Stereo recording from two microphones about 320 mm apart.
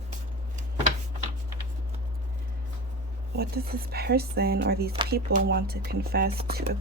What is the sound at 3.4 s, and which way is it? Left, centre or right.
Speech, right.